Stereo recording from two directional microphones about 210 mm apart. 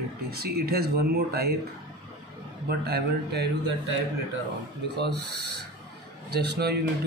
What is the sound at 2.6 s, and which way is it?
Speech, 50° right (ahead or behind).